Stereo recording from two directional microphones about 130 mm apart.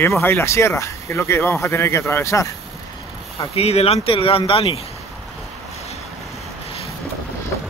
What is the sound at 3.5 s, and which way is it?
Speech, 50° left (ahead or behind).